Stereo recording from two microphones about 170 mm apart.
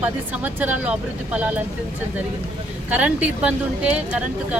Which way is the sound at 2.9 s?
10° right (ahead or behind).